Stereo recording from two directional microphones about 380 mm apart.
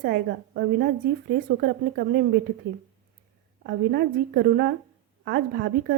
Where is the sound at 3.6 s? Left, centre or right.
Right.